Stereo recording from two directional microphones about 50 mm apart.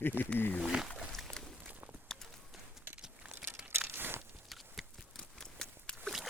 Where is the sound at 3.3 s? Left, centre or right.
Right.